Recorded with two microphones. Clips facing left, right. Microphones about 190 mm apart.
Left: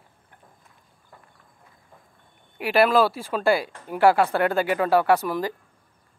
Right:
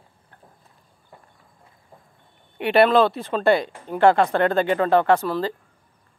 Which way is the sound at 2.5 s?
5° left (ahead or behind).